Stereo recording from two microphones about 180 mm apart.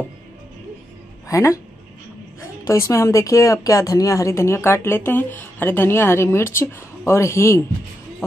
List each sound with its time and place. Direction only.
1.3 s speech: 15° left (ahead or behind)
2.6 s speech: 15° left (ahead or behind)